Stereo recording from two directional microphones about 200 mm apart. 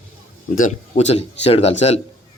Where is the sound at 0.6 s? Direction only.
40° left (ahead or behind).